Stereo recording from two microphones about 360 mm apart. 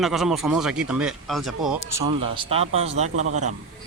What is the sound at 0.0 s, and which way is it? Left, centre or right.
Speech, centre.